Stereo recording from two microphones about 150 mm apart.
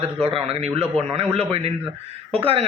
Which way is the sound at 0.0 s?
40° right (ahead or behind).